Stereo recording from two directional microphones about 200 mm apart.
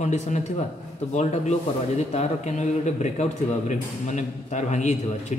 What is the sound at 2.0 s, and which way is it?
A man's voice, 35° left (ahead or behind).